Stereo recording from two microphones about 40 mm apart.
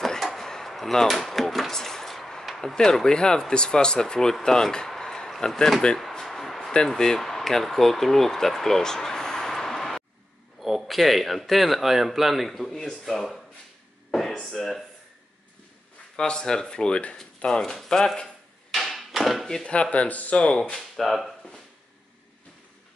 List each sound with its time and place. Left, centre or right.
0.2 s a sound: centre
2.7 s speech: centre
5.5 s speech: centre
6.1 s music: centre
7.0 s speech: centre
10.6 s speech: centre
14.1 s a sound: centre
16.2 s speech: centre
18.7 s a sound: centre
19.7 s speech: left
20.3 s speech: left
20.9 s speech: centre